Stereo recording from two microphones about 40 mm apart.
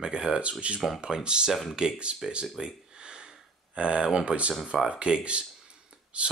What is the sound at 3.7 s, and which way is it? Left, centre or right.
Speech, right.